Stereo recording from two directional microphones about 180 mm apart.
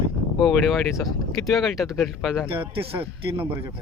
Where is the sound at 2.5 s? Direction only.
30° right (ahead or behind).